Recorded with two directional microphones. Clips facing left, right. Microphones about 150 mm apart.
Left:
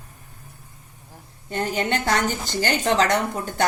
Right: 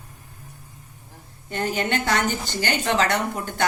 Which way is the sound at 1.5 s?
35° left (ahead or behind).